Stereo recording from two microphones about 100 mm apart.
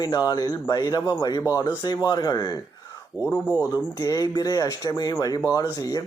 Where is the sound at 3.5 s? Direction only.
20° right (ahead or behind).